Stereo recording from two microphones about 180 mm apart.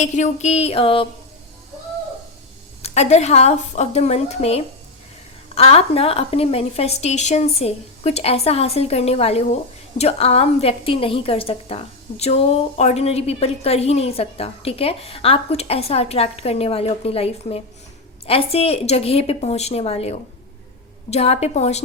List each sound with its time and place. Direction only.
0.0 s a woman's voice: 40° left (ahead or behind)
2.8 s a woman's voice: 35° left (ahead or behind)